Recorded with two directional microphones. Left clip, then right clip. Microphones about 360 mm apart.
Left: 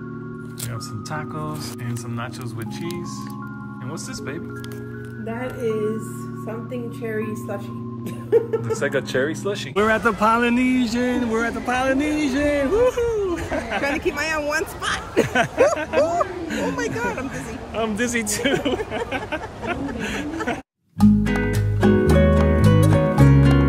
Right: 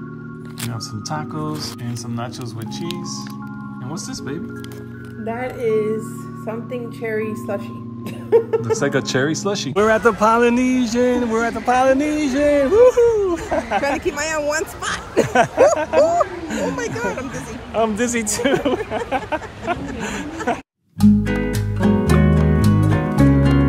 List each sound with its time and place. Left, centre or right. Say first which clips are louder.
1.1 s speech: right 3 dB; centre
5.2 s speech: right 4 dB; right
8.7 s speech: even; centre
9.8 s a man's voice: right 4 dB; centre
21.0 s music: right 1 dB; centre